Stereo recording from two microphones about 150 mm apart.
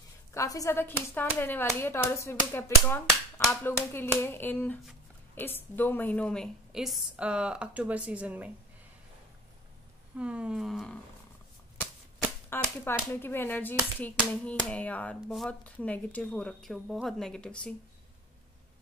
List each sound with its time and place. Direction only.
0.3 s a woman's voice: 20° left (ahead or behind); by 8.5 s 10° right (ahead or behind)
10.1 s a woman's voice: 5° right (ahead or behind)
12.4 s speech: 15° left (ahead or behind)